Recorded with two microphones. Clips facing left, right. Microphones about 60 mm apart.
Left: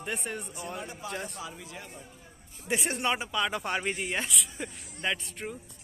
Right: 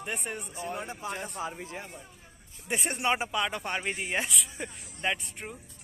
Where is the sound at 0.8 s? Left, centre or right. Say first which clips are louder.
Right 1 dB; right.